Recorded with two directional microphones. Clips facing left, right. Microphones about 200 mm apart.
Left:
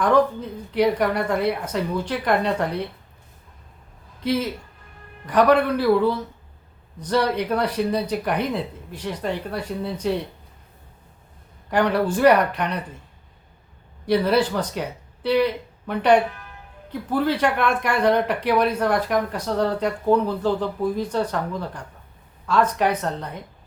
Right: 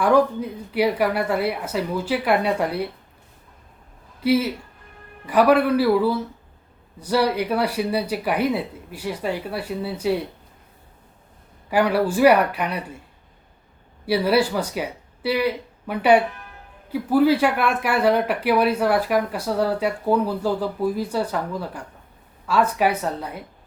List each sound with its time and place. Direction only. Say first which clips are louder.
0.0 s speech: right 1 dB; 10° right (ahead or behind)
4.2 s speech: right 4 dB; 5° right (ahead or behind)
11.7 s speech: right 1 dB; 10° right (ahead or behind)
14.0 s speech: even; 10° right (ahead or behind)